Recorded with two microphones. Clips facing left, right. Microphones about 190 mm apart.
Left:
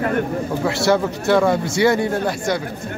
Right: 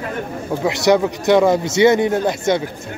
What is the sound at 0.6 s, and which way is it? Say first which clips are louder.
A man's voice: right 4 dB; 15° right (ahead or behind).